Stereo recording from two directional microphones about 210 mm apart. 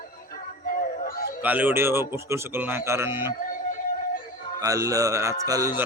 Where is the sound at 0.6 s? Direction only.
45° left (ahead or behind).